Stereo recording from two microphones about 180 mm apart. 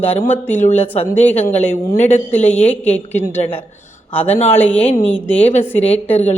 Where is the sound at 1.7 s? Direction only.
40° left (ahead or behind).